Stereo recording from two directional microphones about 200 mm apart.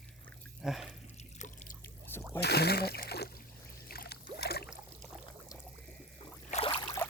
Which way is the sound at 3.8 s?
50° left (ahead or behind).